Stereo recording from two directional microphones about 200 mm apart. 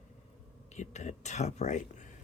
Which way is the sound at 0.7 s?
35° left (ahead or behind).